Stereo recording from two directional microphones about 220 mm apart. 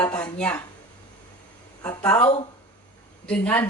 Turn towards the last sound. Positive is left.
turn(degrees=5)  # may be behind; listen again after turning